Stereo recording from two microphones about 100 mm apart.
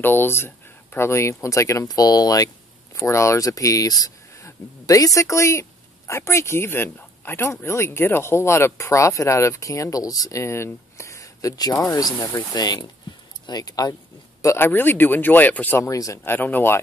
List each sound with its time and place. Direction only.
0.0 s speech: 20° left (ahead or behind); by 13.9 s 40° left (ahead or behind)
14.4 s speech: 25° left (ahead or behind)
15.8 s speech: 30° left (ahead or behind)
16.3 s speech: 20° left (ahead or behind)